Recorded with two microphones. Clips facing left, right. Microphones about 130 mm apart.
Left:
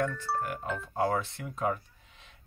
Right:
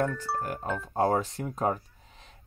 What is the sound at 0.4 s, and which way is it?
Speech, 35° right (ahead or behind).